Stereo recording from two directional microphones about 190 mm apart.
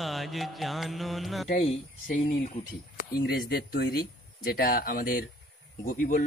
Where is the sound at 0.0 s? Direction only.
Centre (ahead or behind).